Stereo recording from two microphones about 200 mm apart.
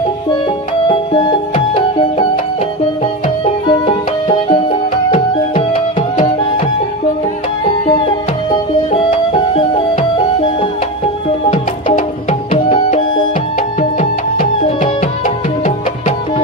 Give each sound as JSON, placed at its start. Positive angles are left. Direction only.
{"t": 0.9, "sound": "music", "side_deg": 25}
{"t": 3.7, "sound": "music", "side_deg": 25}
{"t": 7.9, "sound": "music", "side_deg": 30}
{"t": 11.5, "sound": "music", "side_deg": 35}